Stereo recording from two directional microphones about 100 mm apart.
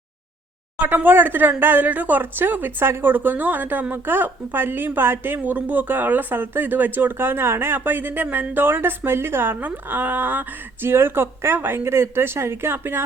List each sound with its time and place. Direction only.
0.8 s speech: 20° right (ahead or behind)